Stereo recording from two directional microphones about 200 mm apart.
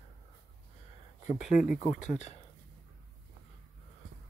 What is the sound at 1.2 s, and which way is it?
Speech, 35° left (ahead or behind).